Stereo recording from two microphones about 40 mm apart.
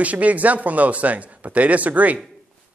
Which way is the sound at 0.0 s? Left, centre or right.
Right.